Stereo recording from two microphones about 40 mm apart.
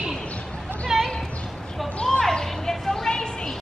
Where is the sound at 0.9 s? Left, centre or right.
Centre.